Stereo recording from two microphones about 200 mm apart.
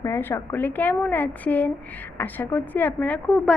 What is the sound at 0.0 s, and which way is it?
A woman's voice, 10° left (ahead or behind).